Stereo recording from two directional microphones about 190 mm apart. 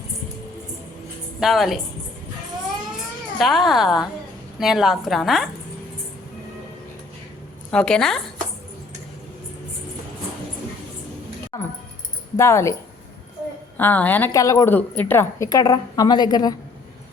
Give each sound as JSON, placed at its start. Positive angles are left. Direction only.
{"t": 1.4, "sound": "a woman's voice", "side_deg": 0}
{"t": 3.3, "sound": "a woman's voice", "side_deg": 0}
{"t": 7.7, "sound": "a woman's voice", "side_deg": 5}
{"t": 11.5, "sound": "a sound", "side_deg": 20}
{"t": 12.4, "sound": "a woman's voice", "side_deg": 15}
{"t": 13.7, "sound": "a woman's voice", "side_deg": 10}